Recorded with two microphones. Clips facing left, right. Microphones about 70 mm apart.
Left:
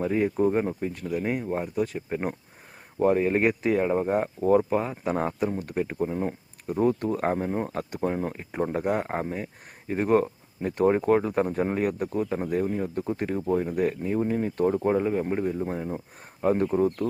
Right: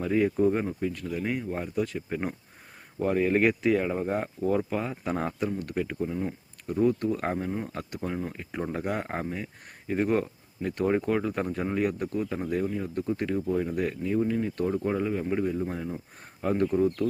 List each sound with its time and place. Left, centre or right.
0.0 s speech: left
1.0 s speech: centre
4.4 s speech: left
4.9 s speech: centre
6.0 s speech: left
6.7 s speech: left
8.6 s speech: left
10.7 s speech: left
11.0 s speech: left